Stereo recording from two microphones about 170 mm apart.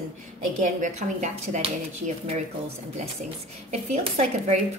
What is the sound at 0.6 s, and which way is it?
A woman's voice, 45° right (ahead or behind).